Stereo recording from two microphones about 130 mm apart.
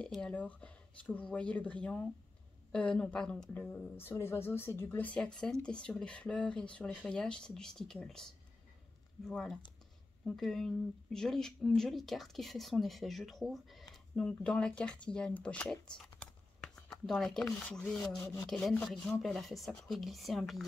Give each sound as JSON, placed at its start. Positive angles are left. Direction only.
{"t": 0.0, "sound": "speech", "side_deg": 5}
{"t": 9.3, "sound": "speech", "side_deg": 0}
{"t": 18.1, "sound": "rub", "side_deg": 20}
{"t": 18.5, "sound": "speech", "side_deg": 5}